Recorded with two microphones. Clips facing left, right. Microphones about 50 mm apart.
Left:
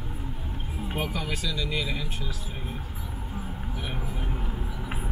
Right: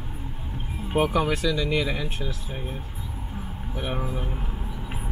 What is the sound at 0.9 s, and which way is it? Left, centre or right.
Speech, right.